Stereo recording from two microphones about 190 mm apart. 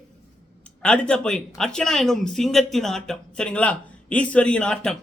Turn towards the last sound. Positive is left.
turn(degrees=5)  # may be behind; listen again after turning